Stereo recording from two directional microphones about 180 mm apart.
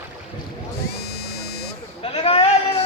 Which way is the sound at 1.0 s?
60° left (ahead or behind).